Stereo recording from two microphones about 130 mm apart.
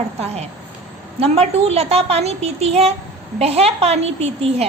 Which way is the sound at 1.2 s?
50° right (ahead or behind).